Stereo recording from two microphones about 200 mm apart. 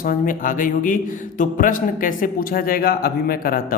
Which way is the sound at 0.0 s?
45° left (ahead or behind).